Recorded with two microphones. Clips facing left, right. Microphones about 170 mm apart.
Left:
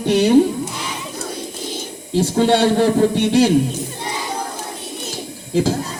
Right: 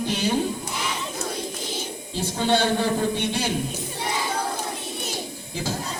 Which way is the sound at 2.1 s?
80° left.